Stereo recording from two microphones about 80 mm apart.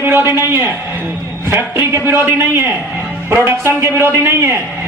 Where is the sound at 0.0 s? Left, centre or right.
Right.